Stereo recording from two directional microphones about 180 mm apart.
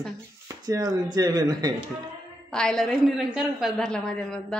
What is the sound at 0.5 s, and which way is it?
Speech, 20° right (ahead or behind).